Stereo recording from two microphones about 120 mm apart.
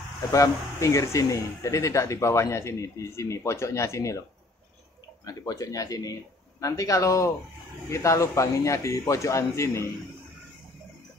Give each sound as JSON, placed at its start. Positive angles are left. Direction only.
{"t": 0.3, "sound": "speech", "side_deg": 25}
{"t": 5.2, "sound": "speech", "side_deg": 30}